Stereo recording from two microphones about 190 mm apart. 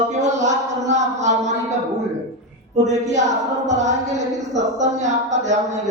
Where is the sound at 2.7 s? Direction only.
40° right (ahead or behind).